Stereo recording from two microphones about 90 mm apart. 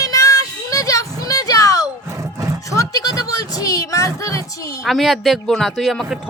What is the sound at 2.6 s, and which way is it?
Music, 40° left (ahead or behind).